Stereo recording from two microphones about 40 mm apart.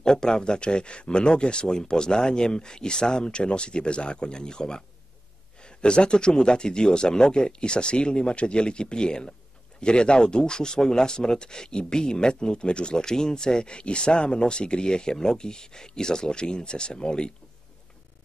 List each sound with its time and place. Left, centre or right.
0.0 s speech: centre